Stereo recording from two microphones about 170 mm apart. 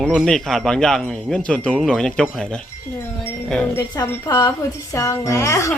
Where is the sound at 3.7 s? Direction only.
20° left (ahead or behind).